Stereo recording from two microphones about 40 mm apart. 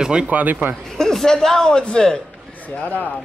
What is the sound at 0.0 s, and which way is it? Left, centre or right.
Speech, right.